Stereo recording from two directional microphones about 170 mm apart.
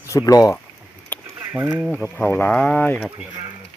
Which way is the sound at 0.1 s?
20° left (ahead or behind).